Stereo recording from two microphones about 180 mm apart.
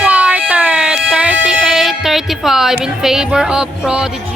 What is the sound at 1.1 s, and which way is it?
Music, 5° right (ahead or behind).